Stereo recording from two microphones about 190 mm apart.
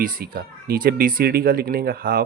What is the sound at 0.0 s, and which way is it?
Speech, 50° right (ahead or behind).